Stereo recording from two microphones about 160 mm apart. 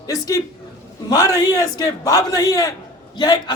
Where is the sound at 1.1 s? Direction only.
25° left (ahead or behind).